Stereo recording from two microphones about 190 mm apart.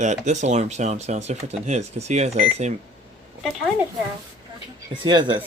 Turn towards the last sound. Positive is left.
turn(degrees=-25)  # may be behind; listen again after turning